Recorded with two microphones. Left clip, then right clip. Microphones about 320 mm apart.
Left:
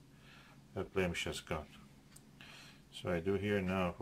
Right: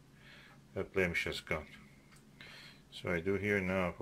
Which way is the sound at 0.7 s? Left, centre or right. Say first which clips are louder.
Right 3 dB; centre.